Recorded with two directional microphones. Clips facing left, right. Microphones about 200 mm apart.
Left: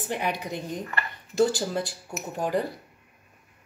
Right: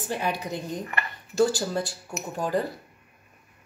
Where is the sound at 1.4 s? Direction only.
20° left (ahead or behind).